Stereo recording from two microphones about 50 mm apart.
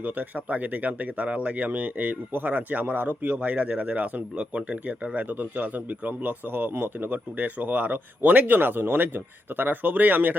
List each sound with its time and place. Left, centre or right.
0.0 s speech: right